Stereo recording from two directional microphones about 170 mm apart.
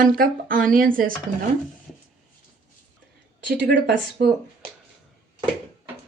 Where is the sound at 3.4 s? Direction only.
80° right.